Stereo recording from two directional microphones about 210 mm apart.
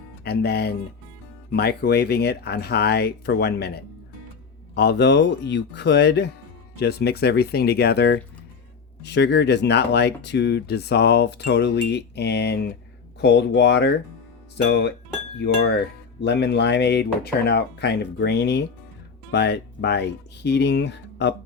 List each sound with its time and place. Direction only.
0.3 s speech: 50° left (ahead or behind)